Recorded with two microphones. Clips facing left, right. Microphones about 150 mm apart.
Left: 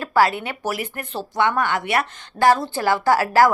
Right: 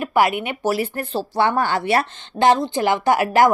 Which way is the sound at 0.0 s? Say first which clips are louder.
Even; 20° right (ahead or behind).